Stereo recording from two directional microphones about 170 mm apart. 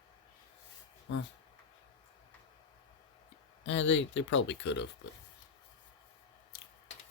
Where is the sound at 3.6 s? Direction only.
90° left.